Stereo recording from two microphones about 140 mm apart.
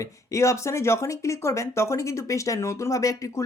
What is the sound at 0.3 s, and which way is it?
Speech, 20° left (ahead or behind).